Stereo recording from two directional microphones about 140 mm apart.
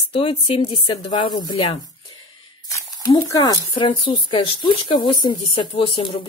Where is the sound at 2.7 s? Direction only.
25° left (ahead or behind).